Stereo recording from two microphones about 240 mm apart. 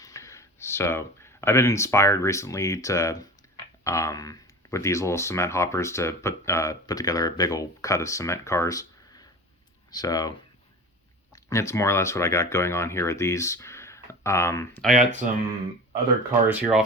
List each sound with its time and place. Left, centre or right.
0.0 s speech: centre
11.3 s speech: centre
16.5 s speech: centre